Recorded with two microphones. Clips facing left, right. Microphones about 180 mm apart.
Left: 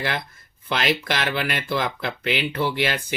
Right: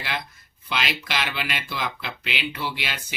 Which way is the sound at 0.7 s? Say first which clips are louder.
Left 5 dB; 50° left (ahead or behind).